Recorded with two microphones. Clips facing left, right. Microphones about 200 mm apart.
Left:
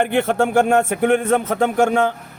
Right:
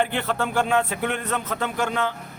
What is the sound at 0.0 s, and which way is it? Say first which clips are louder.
Speech: left 7 dB; 50° left (ahead or behind).